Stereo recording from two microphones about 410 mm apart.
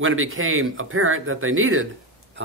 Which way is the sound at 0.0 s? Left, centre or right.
Right.